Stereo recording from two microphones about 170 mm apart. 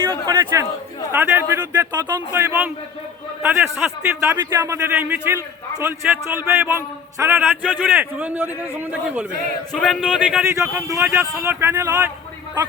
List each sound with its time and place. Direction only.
0.3 s a man's voice: 20° right (ahead or behind)
1.9 s a man's voice: 25° right (ahead or behind); by 4.3 s 5° right (ahead or behind)
4.3 s a man's voice: 20° right (ahead or behind)
10.5 s a man's voice: 20° right (ahead or behind)